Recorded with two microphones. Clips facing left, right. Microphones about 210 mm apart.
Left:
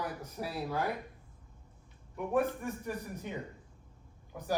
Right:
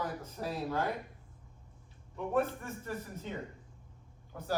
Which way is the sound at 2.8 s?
15° left (ahead or behind).